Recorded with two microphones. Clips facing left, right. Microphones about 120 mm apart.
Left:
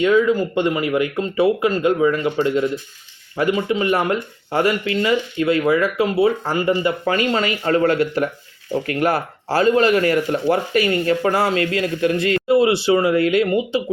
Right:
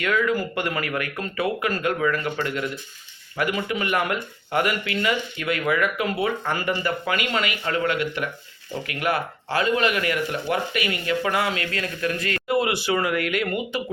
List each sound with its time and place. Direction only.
0.0 s speech: 25° left (ahead or behind)